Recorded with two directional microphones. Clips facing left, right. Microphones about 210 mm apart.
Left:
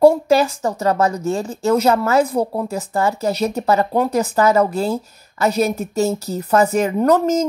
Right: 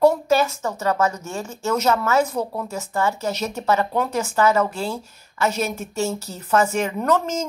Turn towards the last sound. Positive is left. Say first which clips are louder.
# left 6 dB
turn(degrees=40)  # may be behind; listen again after turning